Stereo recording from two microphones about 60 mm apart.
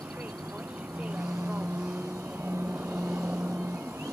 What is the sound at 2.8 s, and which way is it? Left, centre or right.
Vehicle, right.